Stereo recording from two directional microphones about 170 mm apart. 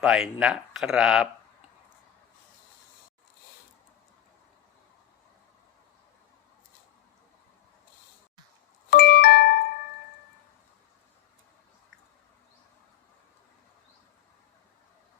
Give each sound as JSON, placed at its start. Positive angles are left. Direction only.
{"t": 0.1, "sound": "speech", "side_deg": -5}
{"t": 8.9, "sound": "music", "side_deg": 60}